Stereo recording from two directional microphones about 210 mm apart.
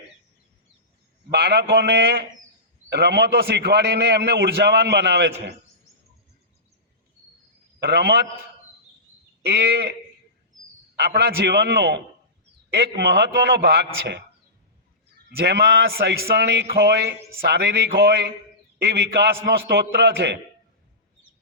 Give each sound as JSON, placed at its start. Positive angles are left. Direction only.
{"t": 1.3, "sound": "a man's voice", "side_deg": -55}
{"t": 7.8, "sound": "a man's voice", "side_deg": -55}
{"t": 9.5, "sound": "a man's voice", "side_deg": -50}
{"t": 10.9, "sound": "a man's voice", "side_deg": -50}
{"t": 15.4, "sound": "a man's voice", "side_deg": -50}